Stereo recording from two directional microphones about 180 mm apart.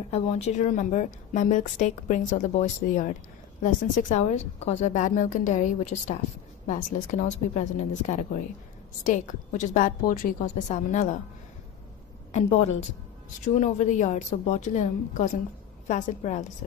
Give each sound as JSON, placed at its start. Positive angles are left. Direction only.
{"t": 0.1, "sound": "a woman's voice", "side_deg": 35}
{"t": 13.5, "sound": "a woman's voice", "side_deg": 40}